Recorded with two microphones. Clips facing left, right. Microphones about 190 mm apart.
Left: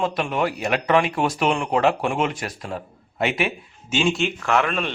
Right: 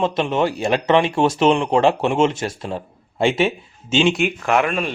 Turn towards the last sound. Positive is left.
turn(degrees=-10)  # may be behind; listen again after turning